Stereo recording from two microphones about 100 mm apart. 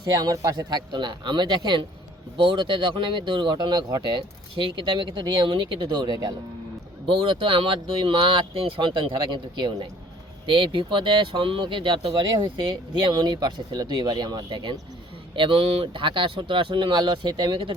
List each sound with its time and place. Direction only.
0.0 s speech: 40° right (ahead or behind)
7.1 s speech: 65° right (ahead or behind)